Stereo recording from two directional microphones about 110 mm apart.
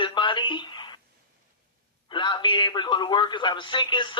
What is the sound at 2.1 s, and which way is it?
A man's voice, 45° left (ahead or behind).